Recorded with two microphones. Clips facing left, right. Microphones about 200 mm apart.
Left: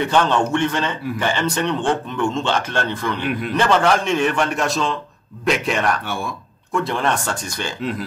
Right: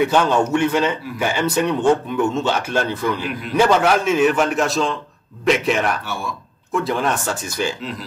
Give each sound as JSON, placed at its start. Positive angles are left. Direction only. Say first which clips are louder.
{"t": 0.0, "sound": "a man's voice", "louder": "right 1 dB", "side_deg": -10}
{"t": 3.2, "sound": "a man's voice", "louder": "left 4 dB", "side_deg": 55}
{"t": 3.5, "sound": "a man's voice", "louder": "right 2 dB", "side_deg": -10}